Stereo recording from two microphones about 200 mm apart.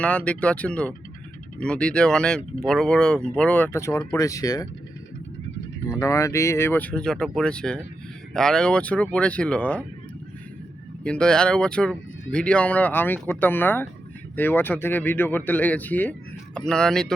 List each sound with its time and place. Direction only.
0.0 s speech: 5° left (ahead or behind)
5.9 s speech: 15° left (ahead or behind)
11.0 s speech: 5° left (ahead or behind)